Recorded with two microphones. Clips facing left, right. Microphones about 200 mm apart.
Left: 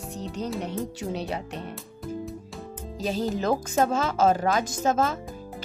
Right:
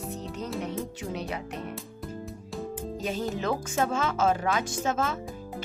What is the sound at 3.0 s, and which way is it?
Speech, 35° left (ahead or behind).